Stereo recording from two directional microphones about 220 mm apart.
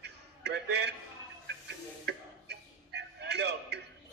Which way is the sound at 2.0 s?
50° right (ahead or behind).